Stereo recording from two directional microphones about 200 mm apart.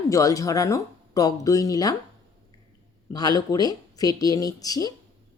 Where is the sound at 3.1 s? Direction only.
20° left (ahead or behind).